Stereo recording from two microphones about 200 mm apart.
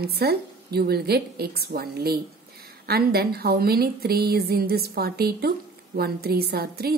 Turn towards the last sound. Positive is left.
turn(degrees=-50)  # may be behind; listen again after turning